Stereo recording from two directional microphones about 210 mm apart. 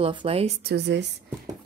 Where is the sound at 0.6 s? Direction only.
55° right (ahead or behind).